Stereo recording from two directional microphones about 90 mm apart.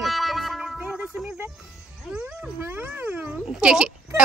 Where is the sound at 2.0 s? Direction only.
15° right (ahead or behind).